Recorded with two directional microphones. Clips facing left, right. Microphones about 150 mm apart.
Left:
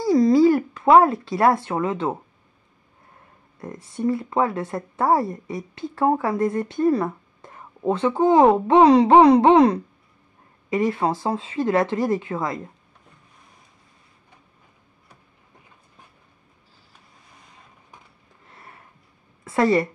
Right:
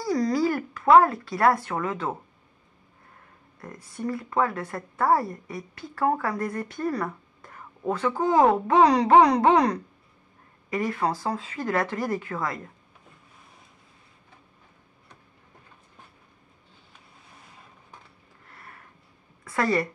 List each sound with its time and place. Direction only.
0.0 s speech: 25° left (ahead or behind)
3.6 s speech: 25° left (ahead or behind)
18.5 s a sound: 20° left (ahead or behind)
19.4 s a woman's voice: 25° left (ahead or behind)